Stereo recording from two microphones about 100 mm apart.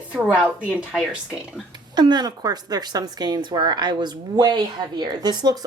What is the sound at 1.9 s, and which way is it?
A woman's voice, 45° right (ahead or behind).